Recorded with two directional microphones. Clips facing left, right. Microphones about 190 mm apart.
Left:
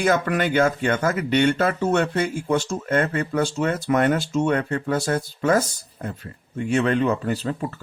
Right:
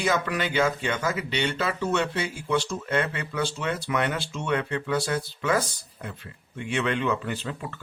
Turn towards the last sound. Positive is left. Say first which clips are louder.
# left 7 dB
turn(degrees=40)  # may be behind; listen again after turning